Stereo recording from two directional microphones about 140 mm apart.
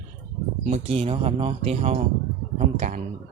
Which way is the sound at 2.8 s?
60° right (ahead or behind).